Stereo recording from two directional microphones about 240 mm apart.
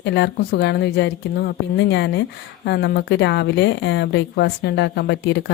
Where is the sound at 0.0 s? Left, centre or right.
Left.